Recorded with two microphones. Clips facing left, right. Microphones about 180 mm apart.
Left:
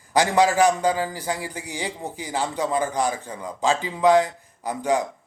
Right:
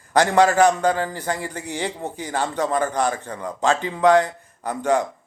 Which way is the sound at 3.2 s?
60° right (ahead or behind).